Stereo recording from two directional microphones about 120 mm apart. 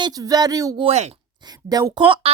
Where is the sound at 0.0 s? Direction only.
30° right (ahead or behind).